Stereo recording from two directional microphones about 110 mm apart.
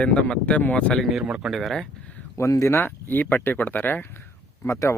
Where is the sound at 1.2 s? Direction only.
5° right (ahead or behind).